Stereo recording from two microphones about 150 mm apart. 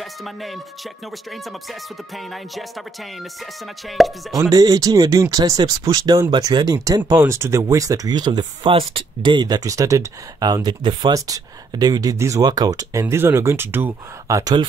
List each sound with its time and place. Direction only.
0.0 s music: centre (ahead or behind)
1.3 s speech: centre (ahead or behind)
3.9 s speech: centre (ahead or behind)
4.4 s speech: 25° right (ahead or behind)